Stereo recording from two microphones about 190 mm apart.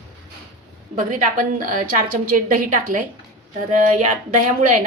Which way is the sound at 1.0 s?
45° right (ahead or behind).